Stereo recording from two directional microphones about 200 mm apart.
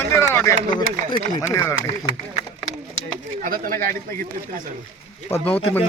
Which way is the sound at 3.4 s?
45° right (ahead or behind).